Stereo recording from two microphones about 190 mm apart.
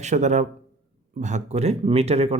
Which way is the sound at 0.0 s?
40° right (ahead or behind).